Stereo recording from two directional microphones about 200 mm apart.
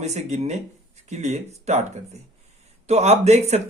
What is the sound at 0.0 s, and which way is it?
Speech, 35° right (ahead or behind).